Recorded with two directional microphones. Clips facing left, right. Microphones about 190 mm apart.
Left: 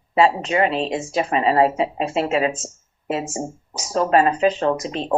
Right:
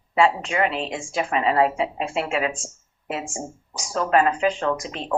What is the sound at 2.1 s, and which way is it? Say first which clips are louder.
Speech: left 4 dB; 20° left (ahead or behind).